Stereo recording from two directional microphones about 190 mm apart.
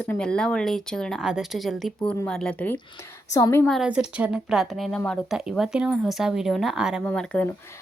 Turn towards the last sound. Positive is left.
turn(degrees=5)  # may be behind; listen again after turning